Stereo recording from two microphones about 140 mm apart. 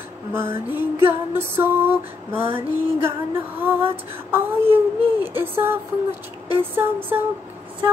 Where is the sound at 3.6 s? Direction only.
15° right (ahead or behind).